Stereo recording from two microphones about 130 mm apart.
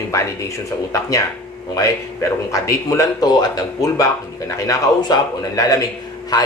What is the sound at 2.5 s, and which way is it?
Speech, 25° left (ahead or behind).